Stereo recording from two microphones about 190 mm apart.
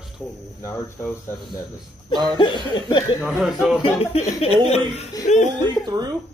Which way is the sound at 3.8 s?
30° left (ahead or behind).